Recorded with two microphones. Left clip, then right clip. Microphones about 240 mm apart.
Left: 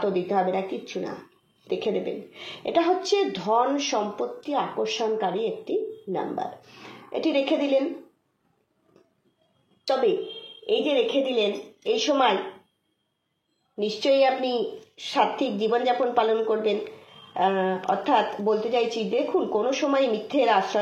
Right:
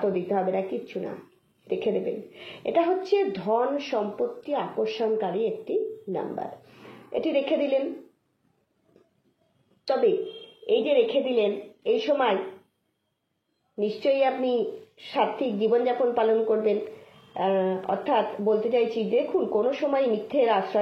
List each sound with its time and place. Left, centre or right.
0.0 s a woman's voice: left
11.1 s a woman's voice: left
13.7 s a woman's voice: left